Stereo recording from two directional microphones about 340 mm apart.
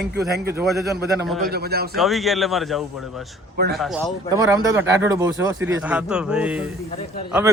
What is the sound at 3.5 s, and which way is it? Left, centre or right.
Speech, right.